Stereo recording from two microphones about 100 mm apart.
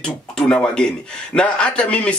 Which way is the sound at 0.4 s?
10° left (ahead or behind).